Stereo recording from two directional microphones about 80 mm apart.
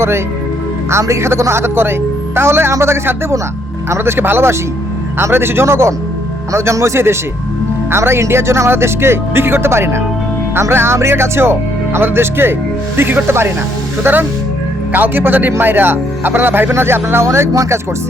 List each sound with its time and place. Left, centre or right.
0.9 s a man's voice: right